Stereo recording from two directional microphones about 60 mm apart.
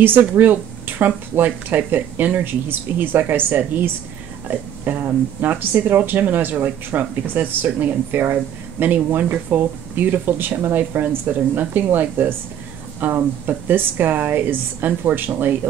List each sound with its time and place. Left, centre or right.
0.0 s speech: right